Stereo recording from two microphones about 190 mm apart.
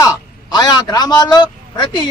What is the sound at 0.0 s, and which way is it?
A man's voice, 20° left (ahead or behind).